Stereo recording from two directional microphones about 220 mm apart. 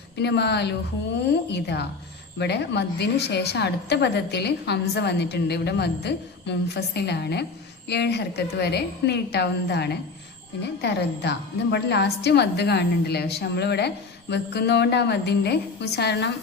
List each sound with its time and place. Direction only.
0.2 s a woman's voice: 50° left (ahead or behind)